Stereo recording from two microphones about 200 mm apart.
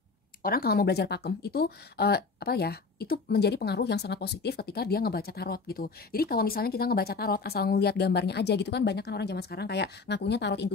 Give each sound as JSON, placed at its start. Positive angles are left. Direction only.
{"t": 0.4, "sound": "speech", "side_deg": 50}